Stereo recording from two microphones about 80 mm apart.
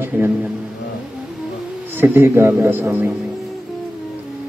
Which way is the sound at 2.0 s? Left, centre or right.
Right.